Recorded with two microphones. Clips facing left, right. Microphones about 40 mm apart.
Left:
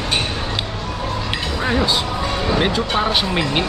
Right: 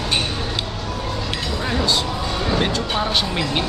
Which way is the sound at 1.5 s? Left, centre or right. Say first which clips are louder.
Left 2 dB; centre.